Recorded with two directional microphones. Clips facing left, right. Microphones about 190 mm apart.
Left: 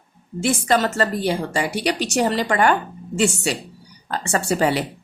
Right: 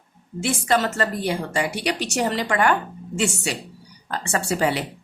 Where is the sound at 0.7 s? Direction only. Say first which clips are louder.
Left 1 dB; 35° left (ahead or behind).